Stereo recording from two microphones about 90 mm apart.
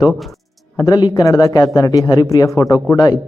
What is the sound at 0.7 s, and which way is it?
Speech, 50° left (ahead or behind).